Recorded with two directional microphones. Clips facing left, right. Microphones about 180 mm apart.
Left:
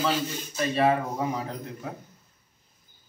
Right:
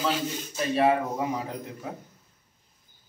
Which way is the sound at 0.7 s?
5° right (ahead or behind).